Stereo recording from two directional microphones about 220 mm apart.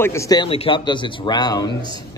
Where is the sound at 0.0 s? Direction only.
15° left (ahead or behind).